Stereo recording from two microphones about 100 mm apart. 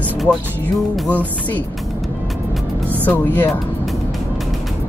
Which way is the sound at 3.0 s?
15° left (ahead or behind).